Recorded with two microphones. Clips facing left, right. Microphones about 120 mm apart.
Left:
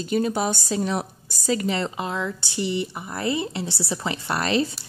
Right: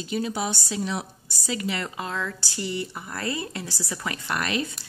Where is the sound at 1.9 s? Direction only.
20° left (ahead or behind).